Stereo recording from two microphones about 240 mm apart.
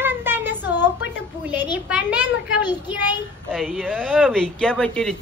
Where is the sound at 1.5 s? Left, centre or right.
Centre.